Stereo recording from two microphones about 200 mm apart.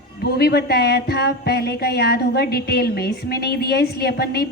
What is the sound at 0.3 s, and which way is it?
A woman's voice, 55° left (ahead or behind).